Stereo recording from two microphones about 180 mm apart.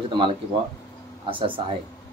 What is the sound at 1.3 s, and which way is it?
Speech, 30° right (ahead or behind).